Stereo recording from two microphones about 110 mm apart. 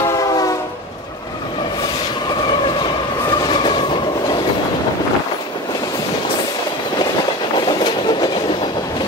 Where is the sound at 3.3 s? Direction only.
45° left (ahead or behind).